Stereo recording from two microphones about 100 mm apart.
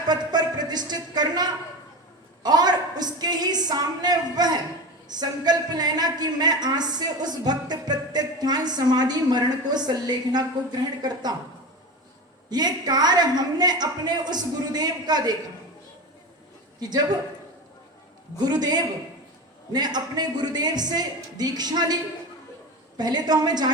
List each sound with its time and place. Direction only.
0.1 s a woman's voice: 45° right (ahead or behind)
12.5 s a woman's voice: 45° right (ahead or behind)
18.4 s a woman's voice: 45° right (ahead or behind)
23.0 s a woman's voice: 45° right (ahead or behind)